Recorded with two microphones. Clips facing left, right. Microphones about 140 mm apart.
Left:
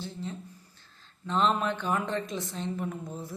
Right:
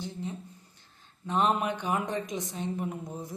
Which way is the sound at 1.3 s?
15° right (ahead or behind).